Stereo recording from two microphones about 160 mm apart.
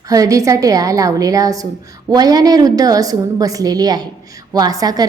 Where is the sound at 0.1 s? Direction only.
20° right (ahead or behind).